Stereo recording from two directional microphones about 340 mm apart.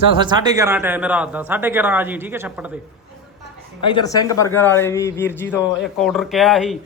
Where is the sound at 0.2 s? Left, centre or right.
Centre.